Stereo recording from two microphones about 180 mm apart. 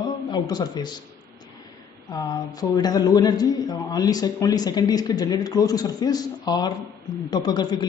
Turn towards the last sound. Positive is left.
turn(degrees=25)  # may be behind; listen again after turning